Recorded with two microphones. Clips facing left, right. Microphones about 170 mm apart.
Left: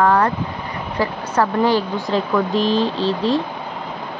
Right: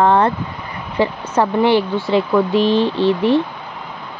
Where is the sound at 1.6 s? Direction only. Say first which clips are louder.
Right 3 dB; 40° left (ahead or behind).